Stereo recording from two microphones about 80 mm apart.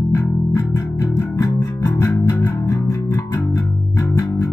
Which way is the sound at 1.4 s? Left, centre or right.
Left.